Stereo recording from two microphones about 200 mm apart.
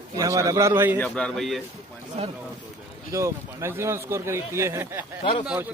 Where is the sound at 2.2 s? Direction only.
30° right (ahead or behind).